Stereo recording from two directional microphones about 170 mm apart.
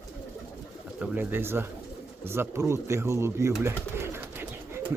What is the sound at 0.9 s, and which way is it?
Speech, 10° right (ahead or behind).